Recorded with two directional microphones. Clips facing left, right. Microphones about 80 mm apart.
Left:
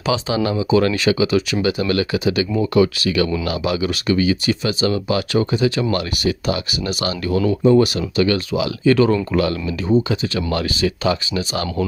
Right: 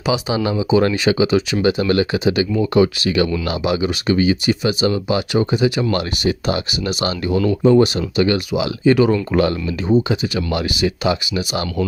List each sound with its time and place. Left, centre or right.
0.0 s speech: centre
9.3 s speech: right
9.7 s speech: centre